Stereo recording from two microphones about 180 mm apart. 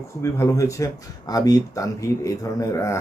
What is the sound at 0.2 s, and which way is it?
A man's voice, 15° left (ahead or behind).